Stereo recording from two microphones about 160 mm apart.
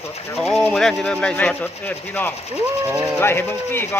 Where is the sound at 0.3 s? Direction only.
5° left (ahead or behind).